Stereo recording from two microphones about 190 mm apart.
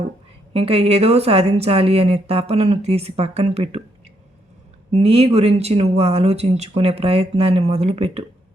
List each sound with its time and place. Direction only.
0.5 s speech: 30° right (ahead or behind)
4.9 s speech: 35° right (ahead or behind)